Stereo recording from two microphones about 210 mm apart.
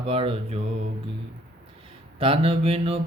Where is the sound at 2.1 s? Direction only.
25° right (ahead or behind).